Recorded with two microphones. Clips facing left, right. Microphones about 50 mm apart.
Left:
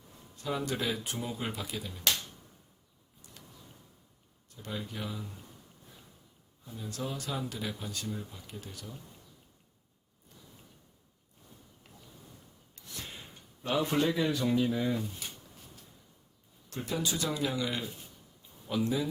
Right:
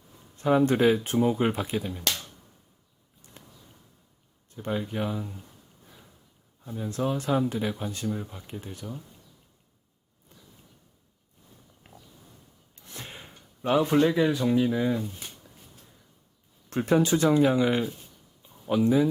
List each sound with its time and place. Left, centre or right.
0.3 s speech: right
3.4 s a sound: right
4.4 s speech: right
6.7 s speech: right
11.9 s a sound: right
12.7 s gasp: right
14.1 s speech: centre
16.6 s speech: right